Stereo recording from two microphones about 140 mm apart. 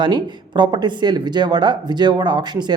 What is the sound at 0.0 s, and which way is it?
Speech, 35° right (ahead or behind).